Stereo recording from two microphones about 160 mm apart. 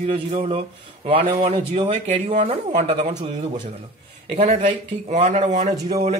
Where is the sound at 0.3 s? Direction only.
35° right (ahead or behind).